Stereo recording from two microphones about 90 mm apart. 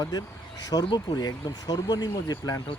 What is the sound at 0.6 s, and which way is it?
Speech, 45° left (ahead or behind).